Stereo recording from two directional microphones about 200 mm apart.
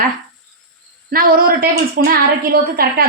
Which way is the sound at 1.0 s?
45° right (ahead or behind).